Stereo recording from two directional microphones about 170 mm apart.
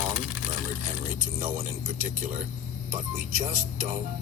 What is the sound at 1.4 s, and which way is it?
Speech, 55° right (ahead or behind).